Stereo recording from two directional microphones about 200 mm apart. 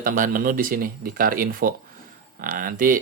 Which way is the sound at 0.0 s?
45° right (ahead or behind).